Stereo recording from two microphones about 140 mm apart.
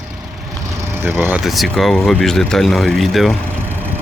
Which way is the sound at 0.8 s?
15° right (ahead or behind).